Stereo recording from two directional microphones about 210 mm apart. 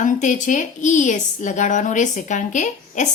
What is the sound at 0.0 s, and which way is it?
A woman's voice, 35° left (ahead or behind).